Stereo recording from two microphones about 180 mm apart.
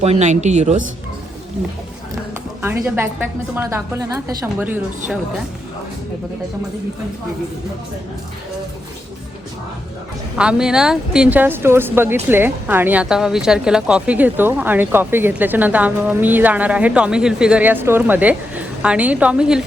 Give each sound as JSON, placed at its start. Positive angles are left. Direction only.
{"t": 0.0, "sound": "a woman's voice", "side_deg": -40}
{"t": 2.8, "sound": "speech", "side_deg": -10}
{"t": 10.3, "sound": "speech", "side_deg": -5}